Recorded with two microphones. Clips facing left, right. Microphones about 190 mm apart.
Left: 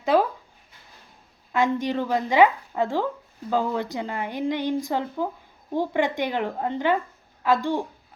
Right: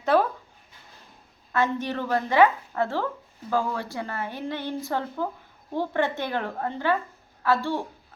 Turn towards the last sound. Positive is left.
turn(degrees=15)  # may be behind; listen again after turning